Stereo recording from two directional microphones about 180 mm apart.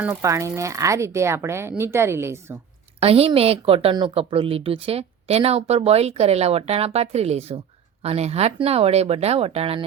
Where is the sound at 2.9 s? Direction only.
35° right (ahead or behind).